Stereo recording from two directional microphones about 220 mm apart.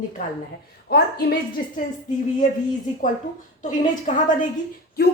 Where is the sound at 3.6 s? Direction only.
35° left (ahead or behind).